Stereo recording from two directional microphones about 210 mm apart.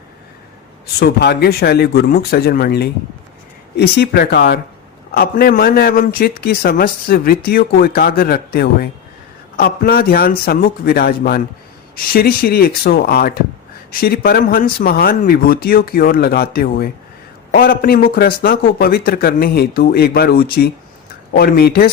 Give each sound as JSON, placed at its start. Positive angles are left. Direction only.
{"t": 0.9, "sound": "a man's voice", "side_deg": 50}